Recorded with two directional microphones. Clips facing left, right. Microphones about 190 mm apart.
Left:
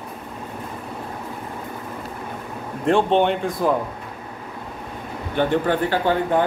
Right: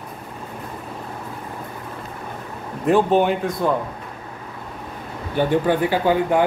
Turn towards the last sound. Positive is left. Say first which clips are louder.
# right 2 dB
turn(degrees=-10)  # may be behind; listen again after turning